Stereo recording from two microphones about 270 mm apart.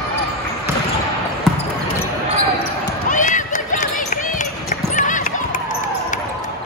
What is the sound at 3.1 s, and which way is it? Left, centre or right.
Basketball bounce, left.